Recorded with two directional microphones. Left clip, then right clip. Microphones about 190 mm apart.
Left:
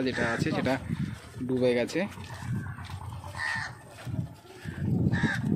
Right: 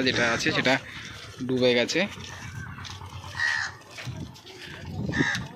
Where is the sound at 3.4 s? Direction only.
35° left (ahead or behind).